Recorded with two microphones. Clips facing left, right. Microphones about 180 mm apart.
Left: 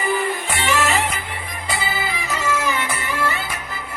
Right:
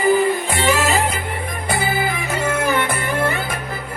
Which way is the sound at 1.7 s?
55° right (ahead or behind).